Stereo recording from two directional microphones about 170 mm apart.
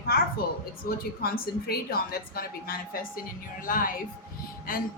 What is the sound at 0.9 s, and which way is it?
A woman's voice, 60° left (ahead or behind).